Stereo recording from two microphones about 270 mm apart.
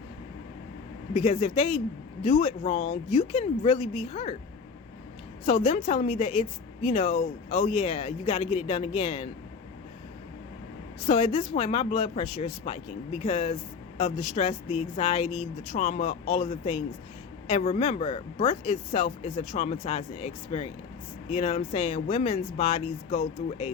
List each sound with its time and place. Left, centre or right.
1.1 s speech: left
5.5 s speech: left
11.0 s speech: left